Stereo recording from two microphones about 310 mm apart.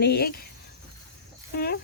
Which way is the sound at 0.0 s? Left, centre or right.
Left.